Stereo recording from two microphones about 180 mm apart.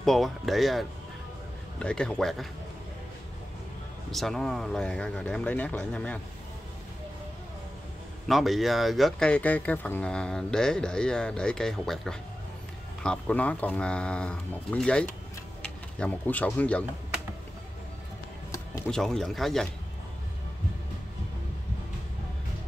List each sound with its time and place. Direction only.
0.0 s speech: centre (ahead or behind)
4.1 s speech: centre (ahead or behind)
8.3 s speech: centre (ahead or behind)
18.9 s speech: 5° left (ahead or behind)